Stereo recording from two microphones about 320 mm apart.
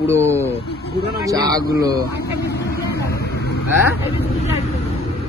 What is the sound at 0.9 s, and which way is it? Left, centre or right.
Speech, right.